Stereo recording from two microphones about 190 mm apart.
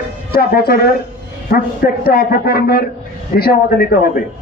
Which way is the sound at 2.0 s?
55° left (ahead or behind).